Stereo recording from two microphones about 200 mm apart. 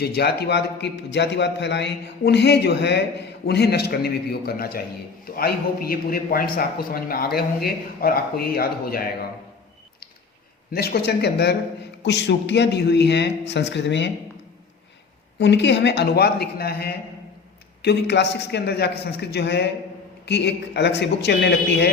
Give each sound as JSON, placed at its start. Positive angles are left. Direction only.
{"t": 0.0, "sound": "a man's voice", "side_deg": 55}
{"t": 10.8, "sound": "a man's voice", "side_deg": 50}
{"t": 15.4, "sound": "a man's voice", "side_deg": 60}